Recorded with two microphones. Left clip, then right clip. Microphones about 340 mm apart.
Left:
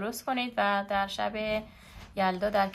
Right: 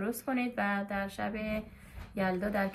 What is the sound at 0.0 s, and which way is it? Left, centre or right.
Speech, centre.